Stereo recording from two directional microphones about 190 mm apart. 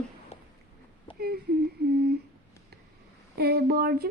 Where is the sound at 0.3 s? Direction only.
35° left (ahead or behind).